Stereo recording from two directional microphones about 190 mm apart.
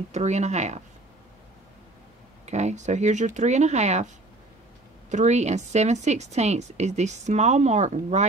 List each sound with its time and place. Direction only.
0.1 s speech: 35° right (ahead or behind)
2.4 s speech: 35° right (ahead or behind)
5.1 s speech: 35° right (ahead or behind)